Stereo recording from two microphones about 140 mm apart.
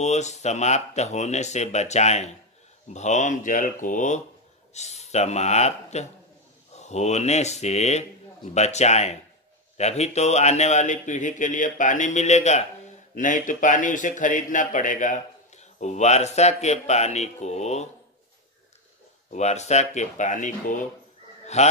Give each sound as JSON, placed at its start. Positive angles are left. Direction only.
{"t": 0.0, "sound": "speech", "side_deg": 55}
{"t": 4.7, "sound": "speech", "side_deg": 50}
{"t": 13.1, "sound": "speech", "side_deg": 70}
{"t": 19.3, "sound": "speech", "side_deg": 55}
{"t": 21.5, "sound": "speech", "side_deg": 50}